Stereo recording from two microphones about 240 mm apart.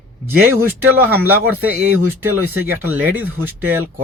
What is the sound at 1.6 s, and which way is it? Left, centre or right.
Speech, centre.